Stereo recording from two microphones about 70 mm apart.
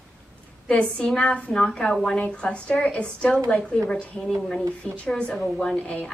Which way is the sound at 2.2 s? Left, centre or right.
Centre.